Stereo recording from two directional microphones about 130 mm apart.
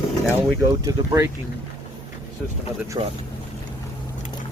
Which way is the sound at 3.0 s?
40° right (ahead or behind).